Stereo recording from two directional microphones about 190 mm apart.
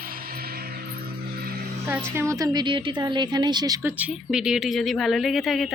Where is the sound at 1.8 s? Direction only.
10° right (ahead or behind).